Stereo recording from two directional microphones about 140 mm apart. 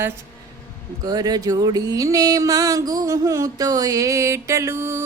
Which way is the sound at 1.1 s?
30° right (ahead or behind).